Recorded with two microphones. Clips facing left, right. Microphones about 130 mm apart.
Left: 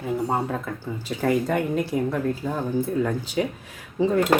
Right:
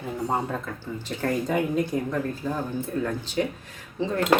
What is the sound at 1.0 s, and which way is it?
Speech, 5° left (ahead or behind).